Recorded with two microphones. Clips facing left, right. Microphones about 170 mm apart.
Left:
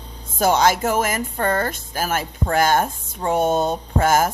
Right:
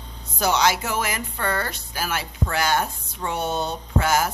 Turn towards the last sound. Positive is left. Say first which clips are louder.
# left 4 dB
turn(degrees=50)  # may be behind; listen again after turning